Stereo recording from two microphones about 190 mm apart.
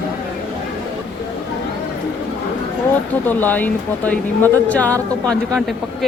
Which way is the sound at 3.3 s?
10° left (ahead or behind).